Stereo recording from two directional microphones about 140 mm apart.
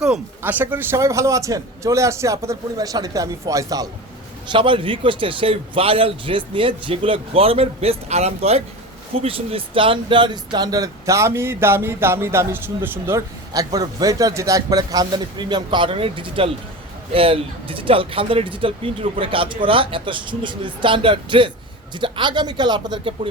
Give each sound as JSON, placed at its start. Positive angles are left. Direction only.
{"t": 0.0, "sound": "speech", "side_deg": -10}
{"t": 4.4, "sound": "speech", "side_deg": -35}